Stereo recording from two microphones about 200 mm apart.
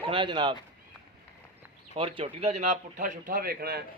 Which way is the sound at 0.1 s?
25° right (ahead or behind).